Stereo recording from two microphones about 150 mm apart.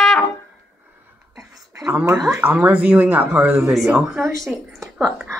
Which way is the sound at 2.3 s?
15° right (ahead or behind).